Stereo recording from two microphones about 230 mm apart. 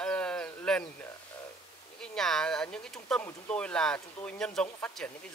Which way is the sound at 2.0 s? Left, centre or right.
Centre.